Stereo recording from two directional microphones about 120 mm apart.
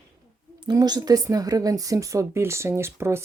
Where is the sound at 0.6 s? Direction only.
35° right (ahead or behind).